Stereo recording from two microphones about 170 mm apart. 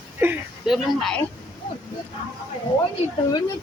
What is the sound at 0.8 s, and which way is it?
Speech, 5° left (ahead or behind).